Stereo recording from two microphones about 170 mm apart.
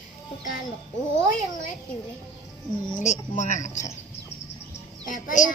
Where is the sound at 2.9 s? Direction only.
45° left (ahead or behind).